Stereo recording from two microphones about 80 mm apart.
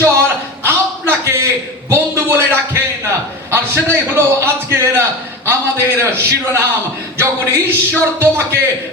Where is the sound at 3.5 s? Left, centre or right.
Right.